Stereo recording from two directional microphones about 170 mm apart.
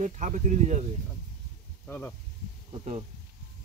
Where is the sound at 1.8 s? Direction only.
10° left (ahead or behind).